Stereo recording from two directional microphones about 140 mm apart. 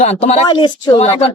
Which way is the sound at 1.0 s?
45° left (ahead or behind).